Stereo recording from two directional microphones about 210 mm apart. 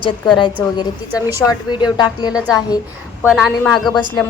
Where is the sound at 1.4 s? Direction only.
20° left (ahead or behind).